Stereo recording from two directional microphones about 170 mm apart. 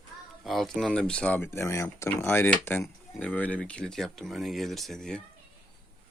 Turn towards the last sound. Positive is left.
turn(degrees=0)  # may be behind; listen again after turning